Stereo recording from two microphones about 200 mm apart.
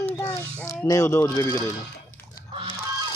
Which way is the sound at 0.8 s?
15° left (ahead or behind).